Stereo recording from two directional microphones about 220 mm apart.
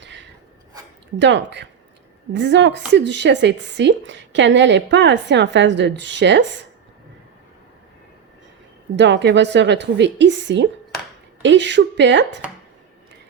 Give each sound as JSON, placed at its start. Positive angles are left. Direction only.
{"t": 0.0, "sound": "rub", "side_deg": -55}
{"t": 1.2, "sound": "a woman's voice", "side_deg": -55}
{"t": 9.0, "sound": "a woman's voice", "side_deg": -50}